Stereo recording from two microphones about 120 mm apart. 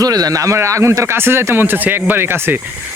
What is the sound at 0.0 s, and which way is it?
Speech, 30° right (ahead or behind).